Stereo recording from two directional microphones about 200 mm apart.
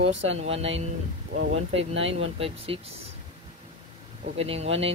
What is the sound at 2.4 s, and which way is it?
Speech, 30° right (ahead or behind).